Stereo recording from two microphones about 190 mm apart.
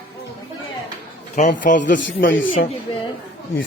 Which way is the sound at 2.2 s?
75° left (ahead or behind).